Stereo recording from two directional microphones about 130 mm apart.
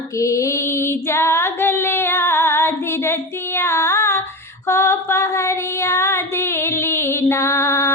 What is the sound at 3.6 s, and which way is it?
Music, 20° left (ahead or behind).